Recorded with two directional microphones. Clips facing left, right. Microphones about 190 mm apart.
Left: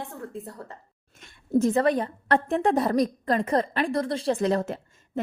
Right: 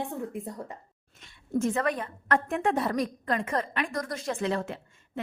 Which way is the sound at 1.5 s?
35° left (ahead or behind).